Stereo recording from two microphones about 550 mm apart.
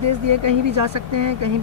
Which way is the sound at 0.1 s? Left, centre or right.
Right.